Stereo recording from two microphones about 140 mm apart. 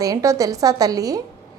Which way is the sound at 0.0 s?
25° right (ahead or behind).